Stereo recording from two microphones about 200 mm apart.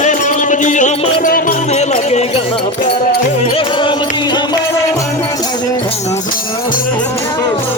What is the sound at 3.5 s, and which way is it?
Music, 25° left (ahead or behind).